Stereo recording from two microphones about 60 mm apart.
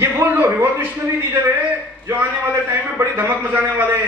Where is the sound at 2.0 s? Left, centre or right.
Right.